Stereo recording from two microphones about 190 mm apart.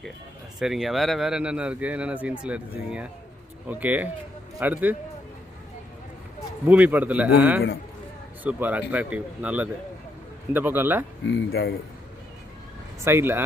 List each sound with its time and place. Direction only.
0.6 s speech: centre (ahead or behind)
6.7 s speech: 10° right (ahead or behind)
11.3 s speech: 60° left (ahead or behind)
13.1 s speech: 10° right (ahead or behind)